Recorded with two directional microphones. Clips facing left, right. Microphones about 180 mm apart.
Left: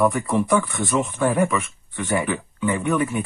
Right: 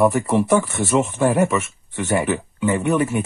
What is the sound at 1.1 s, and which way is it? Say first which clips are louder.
Speech: right 2 dB; 25° right (ahead or behind).